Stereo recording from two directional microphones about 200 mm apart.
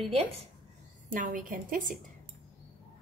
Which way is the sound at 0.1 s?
30° right (ahead or behind).